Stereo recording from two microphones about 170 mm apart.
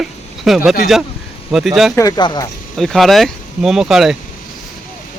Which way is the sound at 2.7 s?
Centre (ahead or behind).